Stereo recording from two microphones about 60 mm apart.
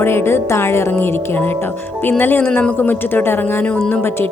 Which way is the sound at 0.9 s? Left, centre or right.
Left.